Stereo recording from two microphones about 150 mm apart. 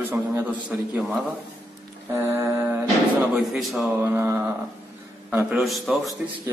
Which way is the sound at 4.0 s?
15° right (ahead or behind).